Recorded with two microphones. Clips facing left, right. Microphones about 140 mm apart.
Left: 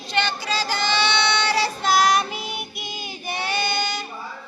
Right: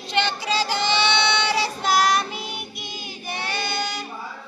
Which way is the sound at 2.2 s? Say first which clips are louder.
Left 2 dB; 5° left (ahead or behind).